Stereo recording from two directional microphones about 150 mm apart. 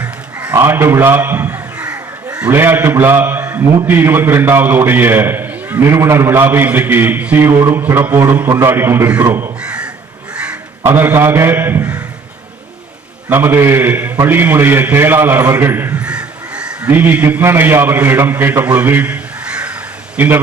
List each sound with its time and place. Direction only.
0.0 s a man's voice: 10° right (ahead or behind)
9.3 s crow: 10° right (ahead or behind)
10.3 s caw: 5° right (ahead or behind)
13.3 s a man's voice: 15° right (ahead or behind)
18.8 s caw: 10° right (ahead or behind)
20.1 s a man's voice: 15° right (ahead or behind)